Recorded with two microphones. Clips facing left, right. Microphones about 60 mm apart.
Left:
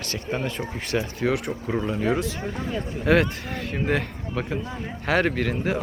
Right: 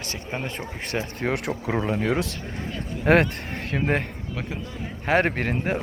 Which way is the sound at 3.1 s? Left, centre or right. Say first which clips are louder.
Right 1 dB; right.